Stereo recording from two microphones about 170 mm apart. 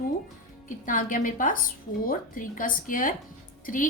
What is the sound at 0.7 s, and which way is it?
A woman's voice, 50° left (ahead or behind).